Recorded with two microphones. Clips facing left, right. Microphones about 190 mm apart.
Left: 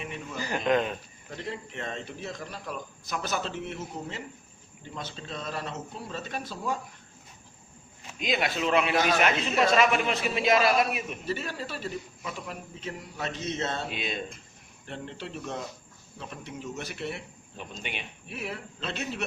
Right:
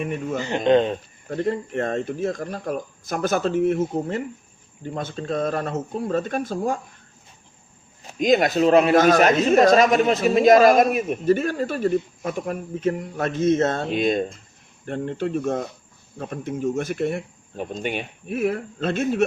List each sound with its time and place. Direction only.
0.0 s speech: 50° right (ahead or behind)
0.3 s speech: 25° right (ahead or behind)
1.3 s a man's voice: 50° right (ahead or behind)
8.0 s a man's voice: 45° right (ahead or behind)